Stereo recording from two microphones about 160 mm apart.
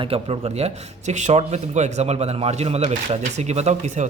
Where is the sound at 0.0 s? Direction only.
40° right (ahead or behind).